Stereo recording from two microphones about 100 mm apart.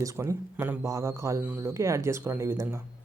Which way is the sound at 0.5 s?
20° right (ahead or behind).